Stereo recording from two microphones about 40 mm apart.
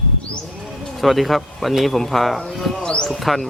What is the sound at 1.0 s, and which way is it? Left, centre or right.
A man's voice, centre.